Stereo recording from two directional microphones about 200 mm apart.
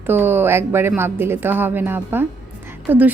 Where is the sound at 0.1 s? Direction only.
10° right (ahead or behind).